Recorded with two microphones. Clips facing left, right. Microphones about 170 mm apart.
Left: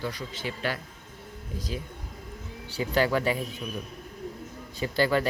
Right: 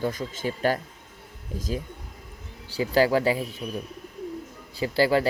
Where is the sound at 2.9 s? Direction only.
35° right (ahead or behind).